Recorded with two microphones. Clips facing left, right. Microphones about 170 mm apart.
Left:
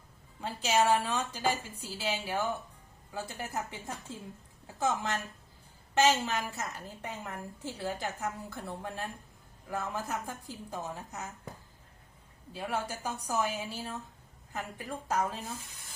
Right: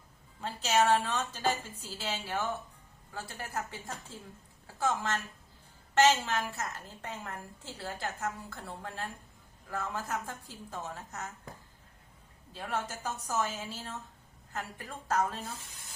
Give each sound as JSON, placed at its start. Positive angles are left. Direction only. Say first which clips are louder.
{"t": 0.4, "sound": "a woman's voice", "louder": "even", "side_deg": 10}
{"t": 12.5, "sound": "a woman's voice", "louder": "left 1 dB", "side_deg": 10}